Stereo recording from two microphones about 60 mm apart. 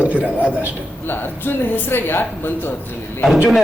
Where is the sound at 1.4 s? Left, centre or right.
Left.